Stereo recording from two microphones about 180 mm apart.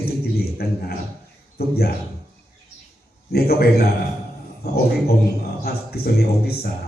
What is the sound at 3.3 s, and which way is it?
Speech, 60° left (ahead or behind).